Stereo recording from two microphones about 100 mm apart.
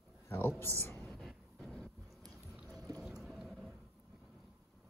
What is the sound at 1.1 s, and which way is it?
Vehicle, centre (ahead or behind).